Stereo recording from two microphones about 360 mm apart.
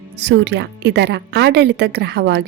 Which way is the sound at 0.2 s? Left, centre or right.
Right.